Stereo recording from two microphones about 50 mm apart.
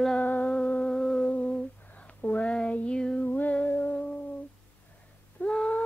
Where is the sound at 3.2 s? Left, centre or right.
Left.